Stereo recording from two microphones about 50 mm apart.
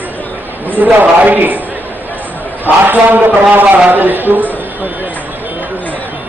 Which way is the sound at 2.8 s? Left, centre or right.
Right.